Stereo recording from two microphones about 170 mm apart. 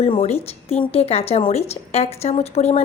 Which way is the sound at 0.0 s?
35° left (ahead or behind).